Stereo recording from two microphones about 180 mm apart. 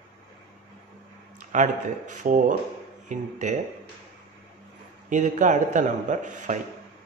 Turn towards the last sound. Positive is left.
turn(degrees=-45)  # may be behind; listen again after turning